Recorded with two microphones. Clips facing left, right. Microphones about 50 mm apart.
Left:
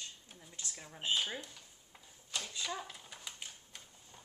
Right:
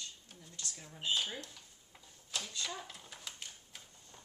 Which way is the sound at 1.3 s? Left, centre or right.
Centre.